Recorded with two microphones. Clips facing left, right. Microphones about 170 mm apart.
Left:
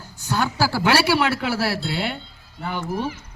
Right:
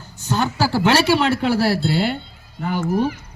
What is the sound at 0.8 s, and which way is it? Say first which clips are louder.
Speech: right 3 dB; 10° left (ahead or behind).